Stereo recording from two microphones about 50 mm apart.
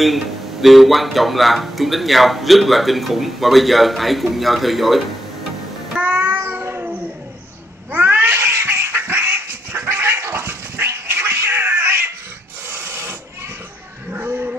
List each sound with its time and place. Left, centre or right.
0.0 s speech: centre
5.9 s music: right
7.9 s cat: right
8.4 s cat: right
12.6 s printer: right
14.2 s a sound: right